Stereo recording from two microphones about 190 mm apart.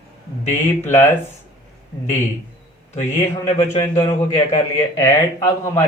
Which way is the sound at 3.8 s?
15° left (ahead or behind).